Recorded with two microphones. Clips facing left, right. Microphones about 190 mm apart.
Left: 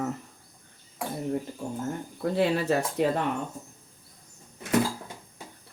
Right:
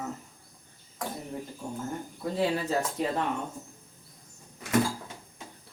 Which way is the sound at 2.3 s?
70° left (ahead or behind).